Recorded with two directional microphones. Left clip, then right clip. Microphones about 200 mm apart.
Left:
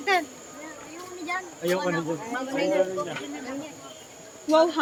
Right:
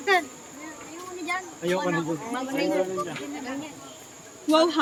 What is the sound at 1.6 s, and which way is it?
Speech, 15° right (ahead or behind).